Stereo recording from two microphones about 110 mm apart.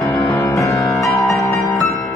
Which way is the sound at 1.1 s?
Centre (ahead or behind).